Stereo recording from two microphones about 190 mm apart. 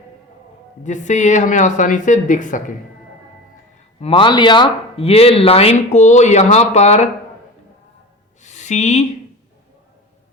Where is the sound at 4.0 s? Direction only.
25° left (ahead or behind).